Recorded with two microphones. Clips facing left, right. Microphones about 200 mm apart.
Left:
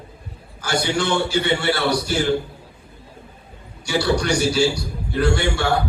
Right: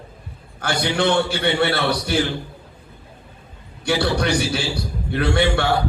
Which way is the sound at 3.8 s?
55° right (ahead or behind).